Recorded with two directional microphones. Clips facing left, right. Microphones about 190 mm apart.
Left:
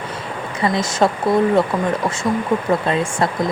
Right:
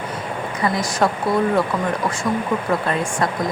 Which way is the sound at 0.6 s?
25° left (ahead or behind).